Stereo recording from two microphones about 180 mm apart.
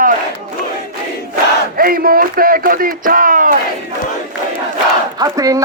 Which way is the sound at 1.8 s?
55° right (ahead or behind).